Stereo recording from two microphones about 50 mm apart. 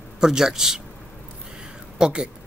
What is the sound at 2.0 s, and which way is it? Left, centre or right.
Speech, centre.